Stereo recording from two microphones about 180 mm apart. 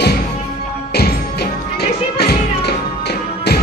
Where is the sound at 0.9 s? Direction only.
65° left (ahead or behind).